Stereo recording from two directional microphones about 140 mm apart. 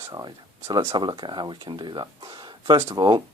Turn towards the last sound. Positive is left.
turn(degrees=-35)  # may be behind; listen again after turning